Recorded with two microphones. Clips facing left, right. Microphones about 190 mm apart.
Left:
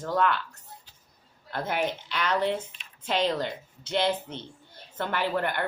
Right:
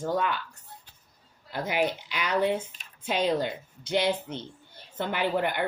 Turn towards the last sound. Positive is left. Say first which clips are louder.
# right 1 dB
turn(degrees=-10)  # may be behind; listen again after turning